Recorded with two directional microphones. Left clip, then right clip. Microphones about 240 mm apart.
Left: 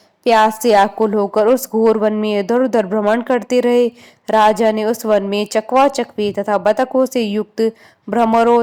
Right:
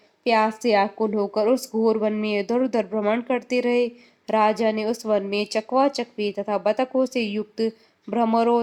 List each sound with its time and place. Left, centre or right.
0.5 s speech: left